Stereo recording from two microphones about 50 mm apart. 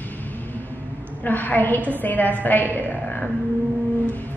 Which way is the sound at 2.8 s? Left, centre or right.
Left.